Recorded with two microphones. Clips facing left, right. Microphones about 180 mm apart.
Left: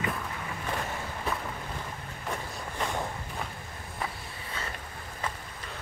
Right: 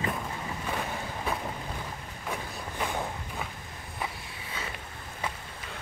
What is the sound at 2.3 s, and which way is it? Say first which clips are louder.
Vehicle: right 1 dB; centre (ahead or behind).